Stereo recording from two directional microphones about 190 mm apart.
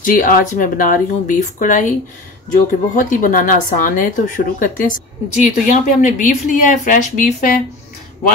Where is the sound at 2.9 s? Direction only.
45° left (ahead or behind).